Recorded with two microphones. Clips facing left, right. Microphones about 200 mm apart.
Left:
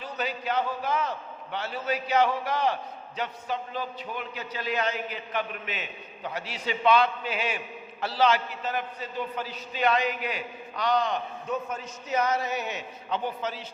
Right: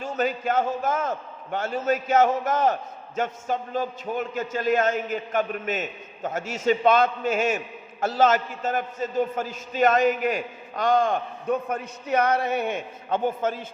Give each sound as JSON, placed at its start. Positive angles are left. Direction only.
{"t": 0.0, "sound": "a man's voice", "side_deg": -45}